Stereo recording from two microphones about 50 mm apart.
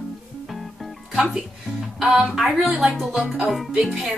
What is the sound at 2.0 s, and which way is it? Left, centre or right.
Speech, centre.